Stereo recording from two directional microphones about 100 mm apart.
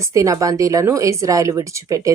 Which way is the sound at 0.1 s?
35° right (ahead or behind).